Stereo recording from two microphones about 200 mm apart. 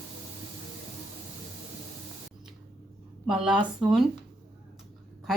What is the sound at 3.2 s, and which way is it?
Speech, 5° right (ahead or behind).